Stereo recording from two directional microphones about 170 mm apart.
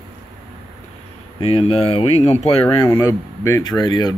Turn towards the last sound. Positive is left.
turn(degrees=25)  # may be behind; listen again after turning